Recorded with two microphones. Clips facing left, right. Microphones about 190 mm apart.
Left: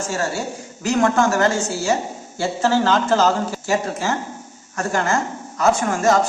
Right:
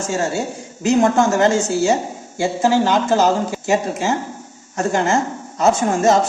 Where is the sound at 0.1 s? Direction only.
20° right (ahead or behind).